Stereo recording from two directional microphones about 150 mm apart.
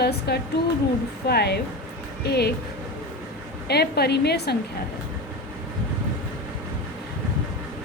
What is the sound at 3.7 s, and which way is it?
Speech, 90° left.